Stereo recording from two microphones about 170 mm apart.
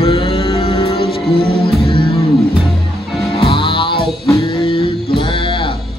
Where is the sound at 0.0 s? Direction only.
35° left (ahead or behind).